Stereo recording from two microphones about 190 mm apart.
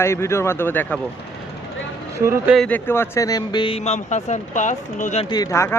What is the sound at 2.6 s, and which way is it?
Speech, 10° left (ahead or behind).